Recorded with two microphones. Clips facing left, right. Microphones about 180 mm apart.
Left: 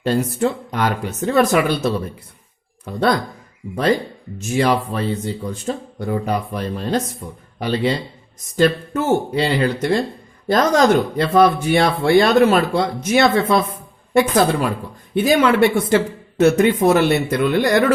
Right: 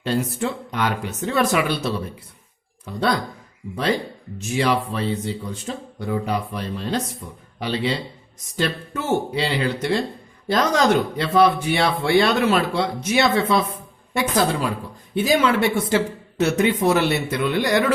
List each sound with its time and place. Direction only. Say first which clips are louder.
0.0 s speech: left 5 dB; 45° left (ahead or behind)
4.4 s speech: left 3 dB; 45° left (ahead or behind)